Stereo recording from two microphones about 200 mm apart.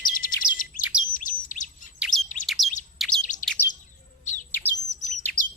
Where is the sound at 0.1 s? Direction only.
45° left (ahead or behind).